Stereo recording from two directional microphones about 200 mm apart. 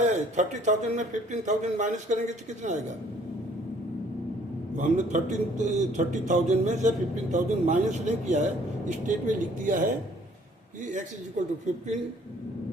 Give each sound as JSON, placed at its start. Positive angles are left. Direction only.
{"t": 0.0, "sound": "a man's voice", "side_deg": -40}
{"t": 4.8, "sound": "a man's voice", "side_deg": -40}
{"t": 11.4, "sound": "a man's voice", "side_deg": -35}